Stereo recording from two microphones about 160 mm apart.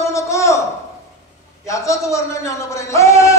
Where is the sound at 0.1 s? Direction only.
20° left (ahead or behind).